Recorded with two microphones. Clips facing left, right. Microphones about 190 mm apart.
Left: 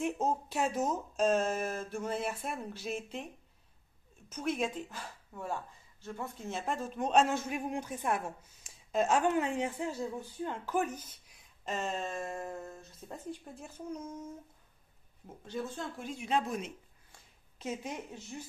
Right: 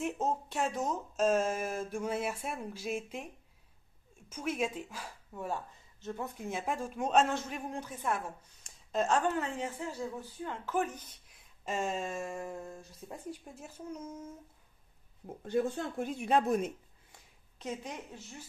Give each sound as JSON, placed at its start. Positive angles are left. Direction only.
{"t": 0.0, "sound": "speech", "side_deg": 0}
{"t": 4.3, "sound": "speech", "side_deg": -10}
{"t": 7.2, "sound": "speech", "side_deg": 10}
{"t": 8.6, "sound": "speech", "side_deg": 5}
{"t": 11.1, "sound": "a sound", "side_deg": 0}
{"t": 12.5, "sound": "speech", "side_deg": 0}
{"t": 15.2, "sound": "speech", "side_deg": -55}
{"t": 17.6, "sound": "a woman's voice", "side_deg": 5}